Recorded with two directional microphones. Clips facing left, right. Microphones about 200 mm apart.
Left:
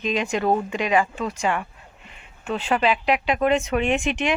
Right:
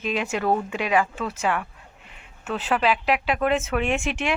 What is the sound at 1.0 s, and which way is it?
Speech, 15° left (ahead or behind).